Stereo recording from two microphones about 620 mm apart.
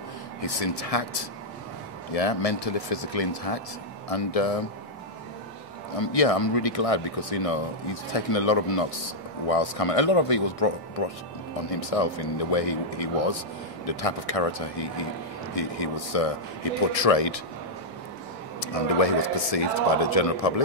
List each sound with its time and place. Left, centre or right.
0.4 s speech: left
5.9 s speech: left
18.6 s speech: left